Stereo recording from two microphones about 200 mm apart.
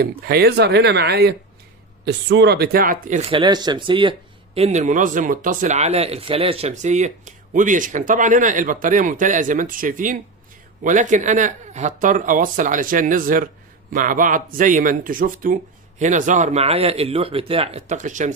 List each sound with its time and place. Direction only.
0.0 s speech: 50° right (ahead or behind)
3.3 s a man's voice: 25° right (ahead or behind)